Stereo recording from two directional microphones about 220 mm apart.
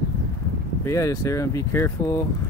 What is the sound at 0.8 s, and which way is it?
Speech, 15° left (ahead or behind).